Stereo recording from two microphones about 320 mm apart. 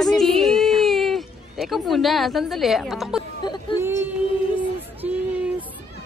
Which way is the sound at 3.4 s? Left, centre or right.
Centre.